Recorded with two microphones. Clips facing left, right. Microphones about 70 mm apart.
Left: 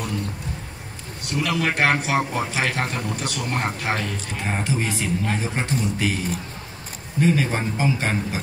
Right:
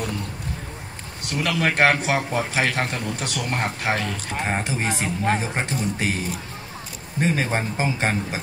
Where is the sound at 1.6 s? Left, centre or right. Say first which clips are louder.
Right 3 dB; right.